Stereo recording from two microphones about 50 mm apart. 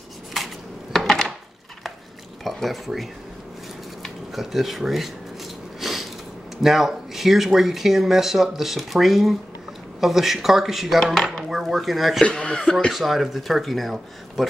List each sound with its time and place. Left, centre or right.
0.3 s dishes: centre
0.9 s wood: centre
2.4 s speech: centre
5.8 s a sound: centre
6.6 s speech: centre
12.2 s speech: centre
12.9 s speech: centre